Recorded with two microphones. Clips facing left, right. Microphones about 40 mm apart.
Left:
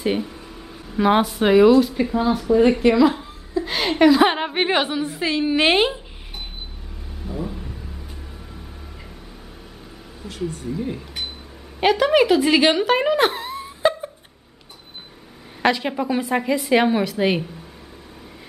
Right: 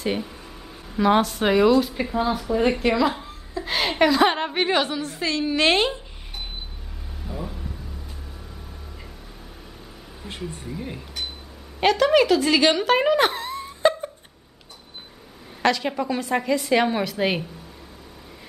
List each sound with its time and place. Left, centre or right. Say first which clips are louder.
0.0 s a sound: left 4 dB; centre
1.0 s a woman's voice: left 2 dB; centre
7.2 s vehicle: left 4 dB; centre
10.7 s speech: left 6 dB; centre
11.8 s a woman's voice: left 1 dB; centre
12.8 s a sound: left 1 dB; centre
15.6 s a woman's voice: left 2 dB; centre